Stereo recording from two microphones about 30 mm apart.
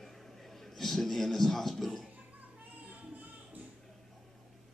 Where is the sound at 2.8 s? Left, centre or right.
Right.